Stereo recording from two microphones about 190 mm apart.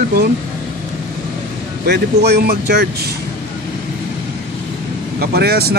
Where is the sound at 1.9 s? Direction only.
60° right (ahead or behind).